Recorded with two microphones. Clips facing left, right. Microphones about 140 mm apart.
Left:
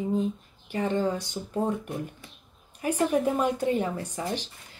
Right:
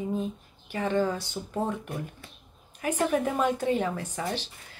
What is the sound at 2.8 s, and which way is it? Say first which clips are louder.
Speech: left 1 dB; 10° left (ahead or behind).